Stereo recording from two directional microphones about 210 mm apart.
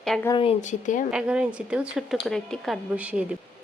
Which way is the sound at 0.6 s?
35° left (ahead or behind).